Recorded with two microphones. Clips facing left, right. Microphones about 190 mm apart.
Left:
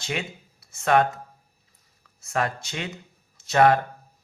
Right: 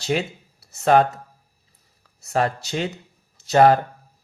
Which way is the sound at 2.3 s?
35° right (ahead or behind).